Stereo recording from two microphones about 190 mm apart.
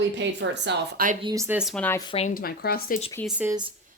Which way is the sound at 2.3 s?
55° left (ahead or behind).